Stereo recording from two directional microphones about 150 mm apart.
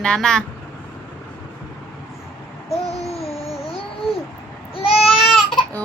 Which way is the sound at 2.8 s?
45° left (ahead or behind).